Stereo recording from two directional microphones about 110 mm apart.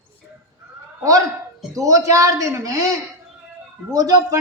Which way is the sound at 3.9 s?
30° right (ahead or behind).